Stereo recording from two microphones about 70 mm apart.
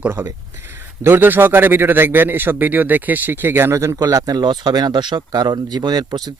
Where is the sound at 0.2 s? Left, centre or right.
Right.